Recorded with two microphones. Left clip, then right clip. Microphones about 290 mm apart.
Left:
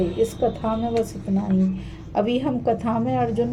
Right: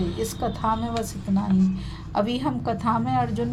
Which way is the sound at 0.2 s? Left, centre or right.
Right.